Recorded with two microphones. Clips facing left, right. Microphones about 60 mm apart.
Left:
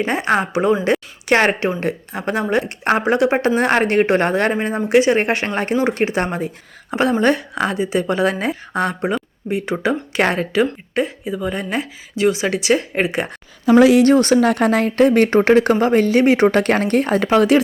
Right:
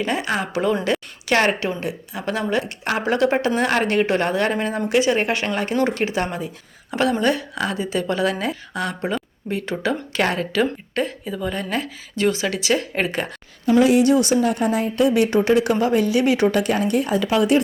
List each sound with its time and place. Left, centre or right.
0.0 s speech: left
0.9 s a sound: left
1.3 s speech: left
10.6 s speech: centre
13.7 s a woman's voice: left
14.1 s a woman's voice: left